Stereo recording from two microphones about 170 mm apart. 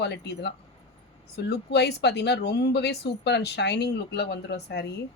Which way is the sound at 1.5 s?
80° left.